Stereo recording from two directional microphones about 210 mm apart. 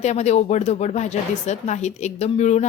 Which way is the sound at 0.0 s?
35° left (ahead or behind).